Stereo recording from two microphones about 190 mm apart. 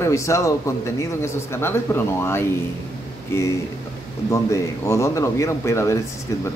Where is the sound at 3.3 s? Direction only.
15° left (ahead or behind).